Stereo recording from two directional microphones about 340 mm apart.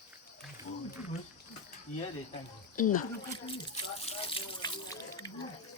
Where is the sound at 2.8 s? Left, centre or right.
Left.